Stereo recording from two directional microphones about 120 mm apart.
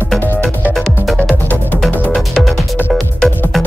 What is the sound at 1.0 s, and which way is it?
Music, centre (ahead or behind).